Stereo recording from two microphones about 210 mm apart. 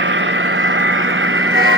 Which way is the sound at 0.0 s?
60° right (ahead or behind).